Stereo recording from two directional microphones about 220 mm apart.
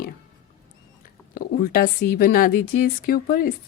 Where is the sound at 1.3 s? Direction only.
40° left (ahead or behind).